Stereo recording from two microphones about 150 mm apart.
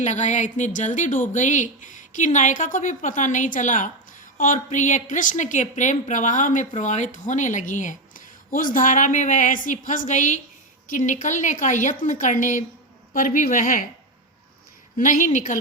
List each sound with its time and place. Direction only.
0.0 s a woman's voice: 50° left (ahead or behind)
14.9 s a woman's voice: 65° left (ahead or behind)